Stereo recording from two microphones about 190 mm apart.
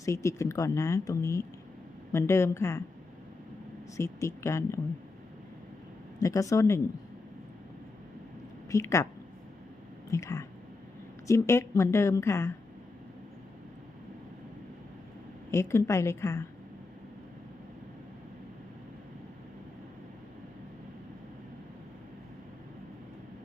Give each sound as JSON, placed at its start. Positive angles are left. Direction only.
{"t": 0.0, "sound": "speech", "side_deg": 15}
{"t": 3.9, "sound": "speech", "side_deg": 15}
{"t": 6.1, "sound": "speech", "side_deg": 15}
{"t": 8.7, "sound": "speech", "side_deg": 15}
{"t": 10.1, "sound": "speech", "side_deg": 15}
{"t": 15.5, "sound": "speech", "side_deg": 15}